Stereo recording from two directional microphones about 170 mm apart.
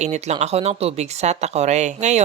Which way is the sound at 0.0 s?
40° right (ahead or behind).